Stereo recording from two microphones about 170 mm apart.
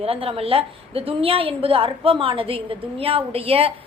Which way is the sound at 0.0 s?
35° right (ahead or behind).